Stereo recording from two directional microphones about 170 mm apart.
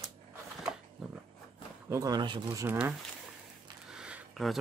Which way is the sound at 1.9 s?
20° right (ahead or behind).